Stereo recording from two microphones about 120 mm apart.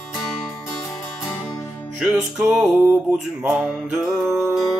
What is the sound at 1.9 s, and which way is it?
Music, 5° right (ahead or behind).